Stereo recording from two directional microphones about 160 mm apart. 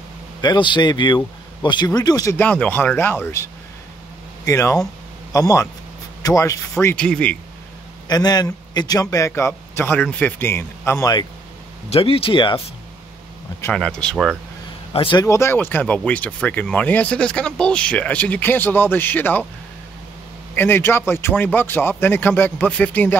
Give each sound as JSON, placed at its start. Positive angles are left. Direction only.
{"t": 0.4, "sound": "speech", "side_deg": 30}
{"t": 4.5, "sound": "a man's voice", "side_deg": 20}
{"t": 8.1, "sound": "a man's voice", "side_deg": 25}
{"t": 11.9, "sound": "speech", "side_deg": 35}
{"t": 13.7, "sound": "speech", "side_deg": 5}
{"t": 14.9, "sound": "a man's voice", "side_deg": 35}
{"t": 15.2, "sound": "speech", "side_deg": 15}
{"t": 20.5, "sound": "speech", "side_deg": 15}